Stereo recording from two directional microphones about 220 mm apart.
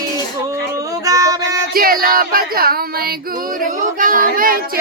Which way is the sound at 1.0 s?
15° right (ahead or behind).